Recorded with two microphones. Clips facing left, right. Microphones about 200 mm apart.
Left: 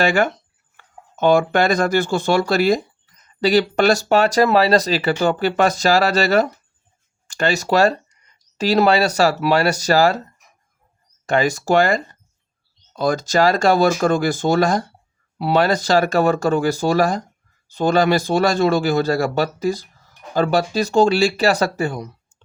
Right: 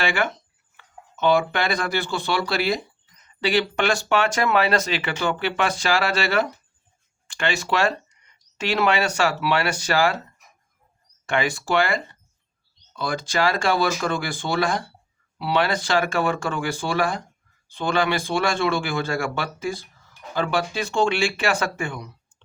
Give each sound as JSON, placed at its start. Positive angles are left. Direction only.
{"t": 0.0, "sound": "speech", "side_deg": 40}
{"t": 11.3, "sound": "speech", "side_deg": 40}